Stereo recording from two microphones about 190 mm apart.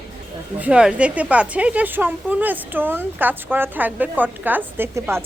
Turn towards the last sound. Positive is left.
turn(degrees=-15)  # may be behind; listen again after turning